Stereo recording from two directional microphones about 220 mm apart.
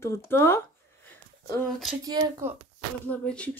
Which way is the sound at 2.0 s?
15° right (ahead or behind).